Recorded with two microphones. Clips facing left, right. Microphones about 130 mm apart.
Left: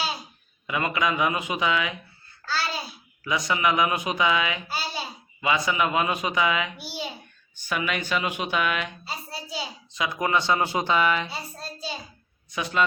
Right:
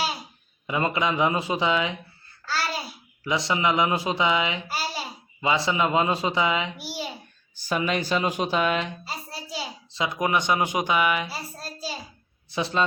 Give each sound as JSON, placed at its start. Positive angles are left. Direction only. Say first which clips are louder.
{"t": 0.7, "sound": "speech", "louder": "right 1 dB", "side_deg": -25}
{"t": 2.5, "sound": "a child's voice", "louder": "right 1 dB", "side_deg": 0}
{"t": 3.2, "sound": "speech", "louder": "even", "side_deg": -25}
{"t": 6.8, "sound": "babbling", "louder": "right 1 dB", "side_deg": -5}
{"t": 7.5, "sound": "speech", "louder": "right 3 dB", "side_deg": -35}
{"t": 9.0, "sound": "a sound", "louder": "even", "side_deg": 0}
{"t": 9.9, "sound": "a child's voice", "louder": "even", "side_deg": -25}
{"t": 12.5, "sound": "speech", "louder": "right 2 dB", "side_deg": -30}